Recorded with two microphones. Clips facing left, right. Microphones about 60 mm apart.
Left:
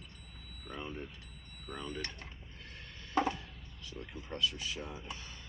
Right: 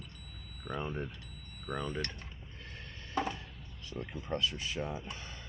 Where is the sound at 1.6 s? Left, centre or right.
Right.